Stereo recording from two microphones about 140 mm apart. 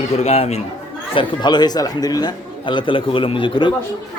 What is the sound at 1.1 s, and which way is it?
A man's voice, 30° left (ahead or behind).